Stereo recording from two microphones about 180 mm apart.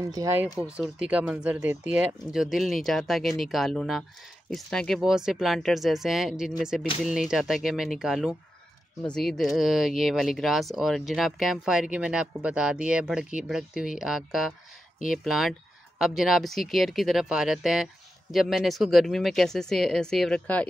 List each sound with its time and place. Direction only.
0.1 s speech: 15° right (ahead or behind)
0.7 s speech: 5° right (ahead or behind)